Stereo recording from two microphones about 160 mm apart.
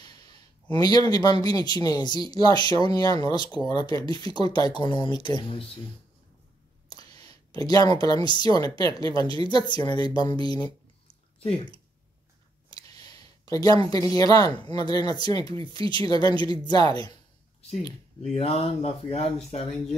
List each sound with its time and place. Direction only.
0.0 s speech: 25° left (ahead or behind)
7.2 s speech: 25° left (ahead or behind)
17.6 s speech: 40° left (ahead or behind)